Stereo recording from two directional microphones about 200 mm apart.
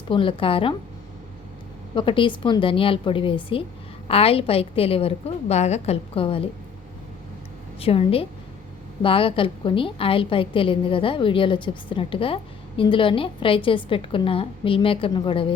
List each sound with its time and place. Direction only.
0.1 s a woman's voice: 25° left (ahead or behind)
2.0 s a woman's voice: 25° left (ahead or behind)
7.8 s a woman's voice: 30° left (ahead or behind)